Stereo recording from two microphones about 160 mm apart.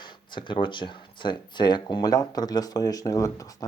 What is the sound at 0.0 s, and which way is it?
Speech, 30° left (ahead or behind).